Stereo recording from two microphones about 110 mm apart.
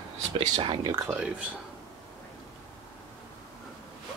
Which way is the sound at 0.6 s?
45° right (ahead or behind).